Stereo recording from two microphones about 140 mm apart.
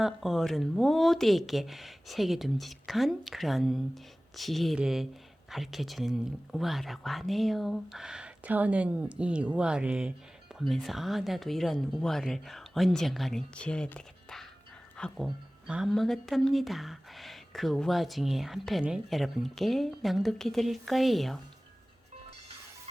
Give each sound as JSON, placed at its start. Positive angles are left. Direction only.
{"t": 0.0, "sound": "speech", "side_deg": 0}